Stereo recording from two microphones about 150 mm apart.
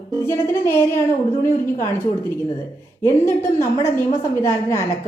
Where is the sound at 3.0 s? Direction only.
20° left (ahead or behind).